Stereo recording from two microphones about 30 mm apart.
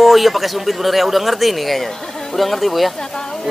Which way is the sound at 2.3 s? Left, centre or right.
Centre.